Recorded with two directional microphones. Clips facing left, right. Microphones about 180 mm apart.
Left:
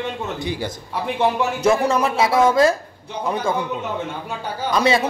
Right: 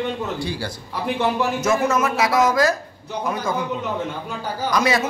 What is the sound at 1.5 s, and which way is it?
A man's voice, 30° left (ahead or behind).